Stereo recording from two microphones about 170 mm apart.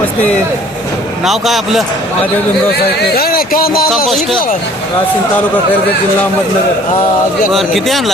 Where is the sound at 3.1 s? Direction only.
60° left (ahead or behind).